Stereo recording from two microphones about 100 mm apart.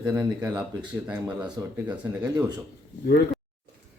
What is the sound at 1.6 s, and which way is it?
Speech, 40° right (ahead or behind).